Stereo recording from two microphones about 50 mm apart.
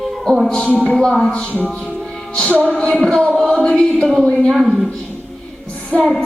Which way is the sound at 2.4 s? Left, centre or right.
Right.